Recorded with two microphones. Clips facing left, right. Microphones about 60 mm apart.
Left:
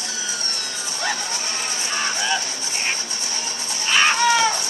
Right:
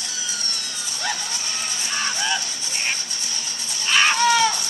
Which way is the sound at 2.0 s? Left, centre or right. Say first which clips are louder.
Left 1 dB; left.